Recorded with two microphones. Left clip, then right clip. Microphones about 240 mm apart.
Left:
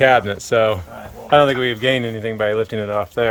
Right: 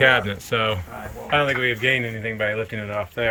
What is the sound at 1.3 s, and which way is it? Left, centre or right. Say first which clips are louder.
Speech: left 6 dB; left.